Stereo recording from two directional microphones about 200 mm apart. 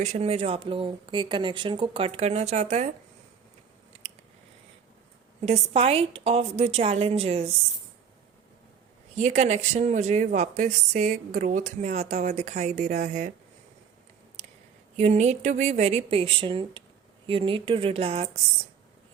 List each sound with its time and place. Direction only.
0.0 s speech: 30° right (ahead or behind)
5.4 s a woman's voice: 30° right (ahead or behind)
9.1 s a woman's voice: 35° right (ahead or behind)
14.9 s a woman's voice: 35° right (ahead or behind)